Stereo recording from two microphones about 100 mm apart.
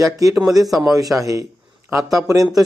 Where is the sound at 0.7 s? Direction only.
Centre (ahead or behind).